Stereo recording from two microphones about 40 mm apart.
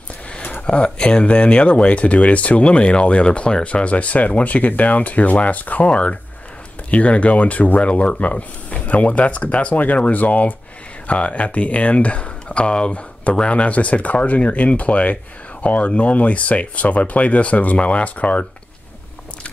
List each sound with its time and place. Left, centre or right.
0.7 s speech: left
5.9 s speech: left